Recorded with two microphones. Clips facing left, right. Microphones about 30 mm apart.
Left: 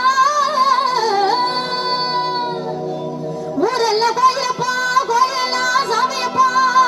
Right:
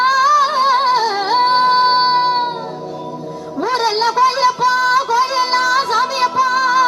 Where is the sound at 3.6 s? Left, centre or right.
Right.